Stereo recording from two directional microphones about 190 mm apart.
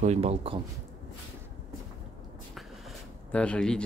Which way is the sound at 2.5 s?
Centre (ahead or behind).